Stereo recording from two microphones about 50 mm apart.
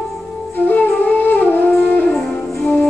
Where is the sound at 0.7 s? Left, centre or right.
Left.